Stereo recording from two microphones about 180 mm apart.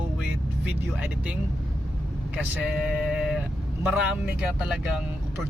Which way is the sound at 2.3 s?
5° right (ahead or behind).